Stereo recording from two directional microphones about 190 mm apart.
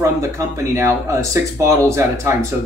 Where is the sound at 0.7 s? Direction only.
15° right (ahead or behind).